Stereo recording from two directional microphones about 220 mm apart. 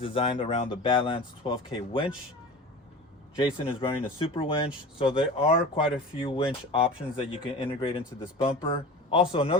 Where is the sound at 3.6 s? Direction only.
25° left (ahead or behind).